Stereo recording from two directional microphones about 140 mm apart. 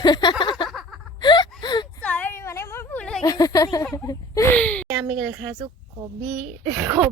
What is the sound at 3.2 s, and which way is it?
Speech, 25° left (ahead or behind).